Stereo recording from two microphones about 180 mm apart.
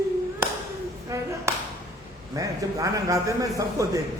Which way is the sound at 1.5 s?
15° right (ahead or behind).